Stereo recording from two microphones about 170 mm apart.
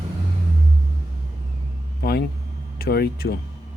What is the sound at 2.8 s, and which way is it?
Speech, 65° left (ahead or behind).